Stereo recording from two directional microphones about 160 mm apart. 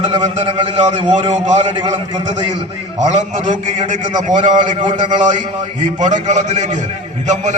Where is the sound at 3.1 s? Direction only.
45° right (ahead or behind).